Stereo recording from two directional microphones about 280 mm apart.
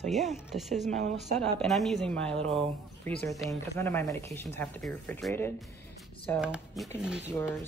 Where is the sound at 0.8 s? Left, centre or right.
Right.